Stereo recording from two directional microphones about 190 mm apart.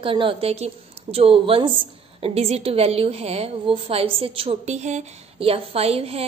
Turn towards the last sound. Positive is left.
turn(degrees=-30)  # may be behind; listen again after turning